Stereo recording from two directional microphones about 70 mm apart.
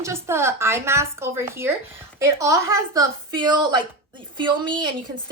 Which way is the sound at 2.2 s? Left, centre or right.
Right.